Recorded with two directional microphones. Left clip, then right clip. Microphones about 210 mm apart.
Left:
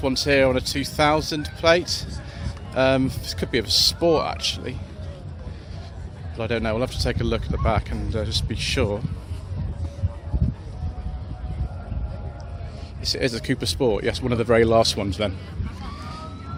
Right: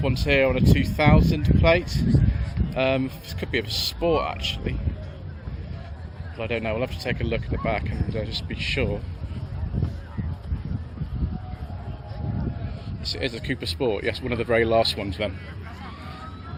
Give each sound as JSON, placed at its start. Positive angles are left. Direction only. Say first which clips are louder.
{"t": 0.0, "sound": "speech", "louder": "left 2 dB", "side_deg": 25}
{"t": 6.3, "sound": "speech", "louder": "left 2 dB", "side_deg": 25}
{"t": 13.1, "sound": "speech", "louder": "left 4 dB", "side_deg": 30}